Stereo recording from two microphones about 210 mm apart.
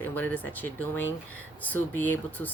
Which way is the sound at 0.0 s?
10° left (ahead or behind).